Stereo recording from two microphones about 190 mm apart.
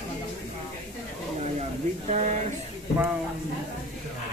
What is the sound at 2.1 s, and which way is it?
Speech, 40° right (ahead or behind).